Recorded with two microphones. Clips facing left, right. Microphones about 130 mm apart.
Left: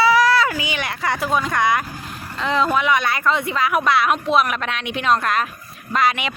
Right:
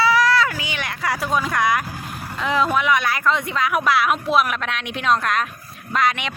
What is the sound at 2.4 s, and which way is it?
Speech, centre (ahead or behind).